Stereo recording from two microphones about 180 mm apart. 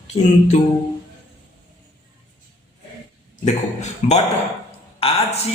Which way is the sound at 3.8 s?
35° left (ahead or behind).